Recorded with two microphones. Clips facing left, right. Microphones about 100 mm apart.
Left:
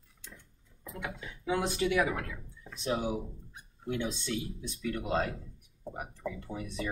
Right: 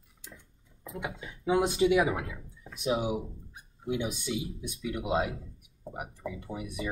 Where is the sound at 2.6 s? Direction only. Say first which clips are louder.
Right 3 dB; 10° right (ahead or behind).